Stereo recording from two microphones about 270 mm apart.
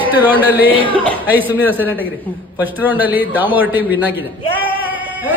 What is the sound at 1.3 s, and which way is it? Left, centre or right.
Speech, centre.